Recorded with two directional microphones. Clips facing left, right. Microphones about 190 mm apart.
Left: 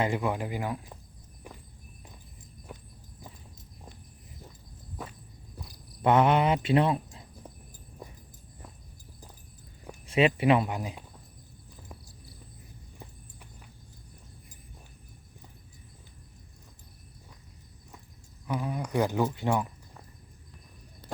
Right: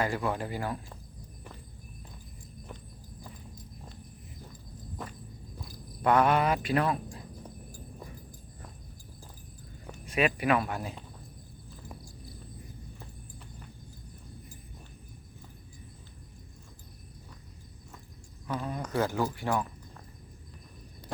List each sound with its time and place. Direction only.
0.0 s speech: 15° left (ahead or behind)
2.7 s walk: 10° left (ahead or behind)
3.2 s horse: 20° left (ahead or behind)
5.6 s speech: 20° left (ahead or behind)
10.1 s speech: 25° left (ahead or behind)
18.4 s speech: 10° left (ahead or behind)